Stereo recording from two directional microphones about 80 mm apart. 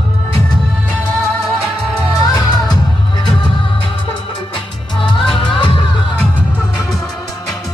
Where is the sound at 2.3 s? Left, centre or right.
Left.